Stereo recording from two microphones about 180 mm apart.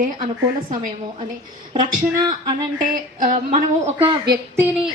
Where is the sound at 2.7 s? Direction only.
45° right (ahead or behind).